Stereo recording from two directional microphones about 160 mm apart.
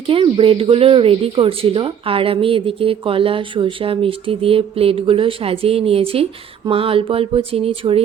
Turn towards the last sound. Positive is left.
turn(degrees=-35)  # may be behind; listen again after turning